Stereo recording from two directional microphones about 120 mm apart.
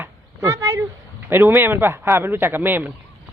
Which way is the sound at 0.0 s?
25° right (ahead or behind).